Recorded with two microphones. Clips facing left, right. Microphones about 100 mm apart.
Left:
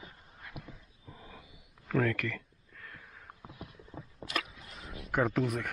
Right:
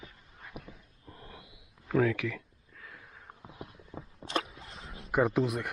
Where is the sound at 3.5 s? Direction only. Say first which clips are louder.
Right 3 dB; 25° right (ahead or behind).